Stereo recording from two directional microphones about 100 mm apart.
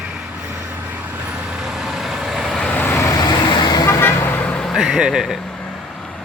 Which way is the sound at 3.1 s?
40° left (ahead or behind).